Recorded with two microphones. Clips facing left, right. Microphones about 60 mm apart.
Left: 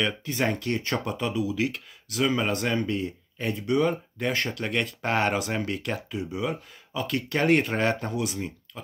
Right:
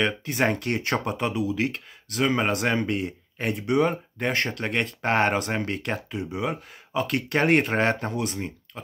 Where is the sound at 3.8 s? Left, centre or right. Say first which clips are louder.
Right 2 dB; right.